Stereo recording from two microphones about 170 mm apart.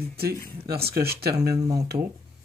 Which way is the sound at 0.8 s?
65° right (ahead or behind).